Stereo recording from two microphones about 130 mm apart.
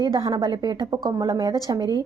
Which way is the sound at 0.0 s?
30° right (ahead or behind).